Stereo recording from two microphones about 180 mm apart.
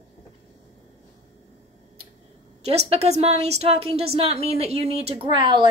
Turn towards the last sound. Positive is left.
turn(degrees=-25)  # may be behind; listen again after turning